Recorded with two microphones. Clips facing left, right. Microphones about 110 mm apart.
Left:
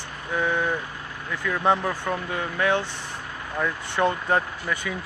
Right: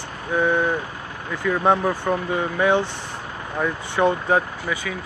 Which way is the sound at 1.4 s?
15° right (ahead or behind).